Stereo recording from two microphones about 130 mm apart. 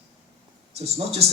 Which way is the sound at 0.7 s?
50° right (ahead or behind).